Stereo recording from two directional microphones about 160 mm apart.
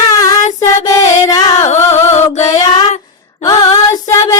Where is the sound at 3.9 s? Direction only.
25° left (ahead or behind).